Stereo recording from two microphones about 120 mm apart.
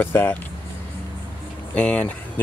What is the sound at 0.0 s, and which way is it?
Speech, 15° left (ahead or behind).